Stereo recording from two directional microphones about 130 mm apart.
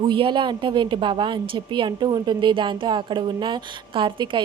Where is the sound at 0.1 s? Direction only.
40° right (ahead or behind).